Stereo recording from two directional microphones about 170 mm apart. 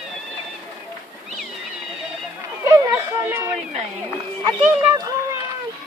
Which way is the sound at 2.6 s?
20° right (ahead or behind).